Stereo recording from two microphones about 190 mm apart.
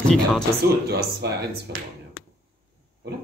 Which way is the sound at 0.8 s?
60° right (ahead or behind).